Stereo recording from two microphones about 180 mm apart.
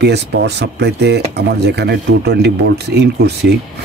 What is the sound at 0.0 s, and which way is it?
Speech, 70° right (ahead or behind).